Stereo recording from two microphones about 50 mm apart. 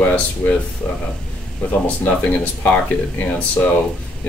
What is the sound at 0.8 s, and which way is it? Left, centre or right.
Speech, centre.